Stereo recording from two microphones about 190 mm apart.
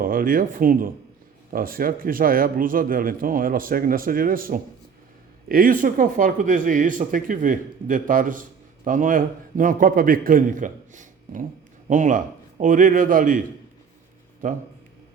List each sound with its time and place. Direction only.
0.0 s speech: 50° right (ahead or behind)
14.4 s speech: 40° right (ahead or behind)